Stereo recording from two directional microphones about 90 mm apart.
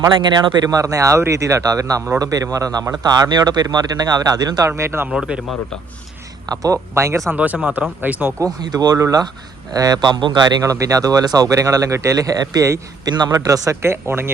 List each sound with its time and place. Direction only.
0.1 s speech: 55° right (ahead or behind)
0.7 s speech: 40° right (ahead or behind)
4.7 s speech: 30° right (ahead or behind)
5.0 s speech: 10° right (ahead or behind)
6.5 s speech: 40° right (ahead or behind)
7.3 s speech: 15° right (ahead or behind)
8.6 s speech: 50° right (ahead or behind)
10.6 s speech: 35° right (ahead or behind)
13.1 s speech: 50° right (ahead or behind)
13.8 s speech: 25° right (ahead or behind)